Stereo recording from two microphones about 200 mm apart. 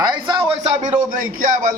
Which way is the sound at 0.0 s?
20° right (ahead or behind).